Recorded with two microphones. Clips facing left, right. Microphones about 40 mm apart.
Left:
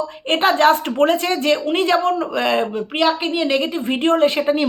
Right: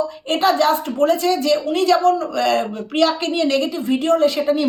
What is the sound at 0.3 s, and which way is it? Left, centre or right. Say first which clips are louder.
Speech: left 2 dB; left.